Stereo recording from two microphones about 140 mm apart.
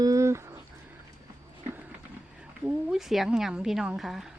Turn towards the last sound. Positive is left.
turn(degrees=0)  # may be behind; listen again after turning